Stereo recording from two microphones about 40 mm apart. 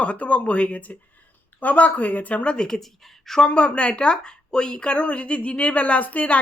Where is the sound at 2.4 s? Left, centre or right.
Left.